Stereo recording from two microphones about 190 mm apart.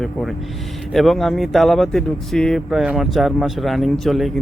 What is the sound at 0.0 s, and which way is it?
Speech, centre (ahead or behind).